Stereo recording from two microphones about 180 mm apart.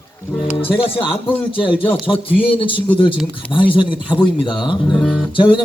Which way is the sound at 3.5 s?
25° left (ahead or behind).